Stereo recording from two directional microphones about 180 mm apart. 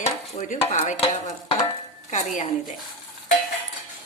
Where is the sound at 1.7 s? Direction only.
45° left (ahead or behind).